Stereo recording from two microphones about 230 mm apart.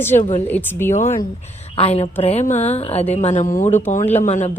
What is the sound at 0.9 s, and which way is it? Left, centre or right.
A woman's voice, left.